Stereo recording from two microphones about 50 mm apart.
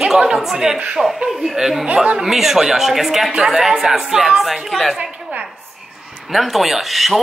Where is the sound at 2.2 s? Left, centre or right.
Centre.